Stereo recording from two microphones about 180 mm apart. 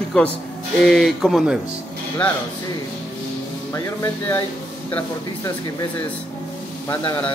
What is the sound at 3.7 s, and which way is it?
Speech, 15° left (ahead or behind).